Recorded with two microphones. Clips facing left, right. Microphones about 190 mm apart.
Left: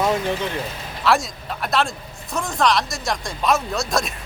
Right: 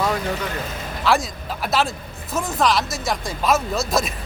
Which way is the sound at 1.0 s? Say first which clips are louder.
Even; centre (ahead or behind).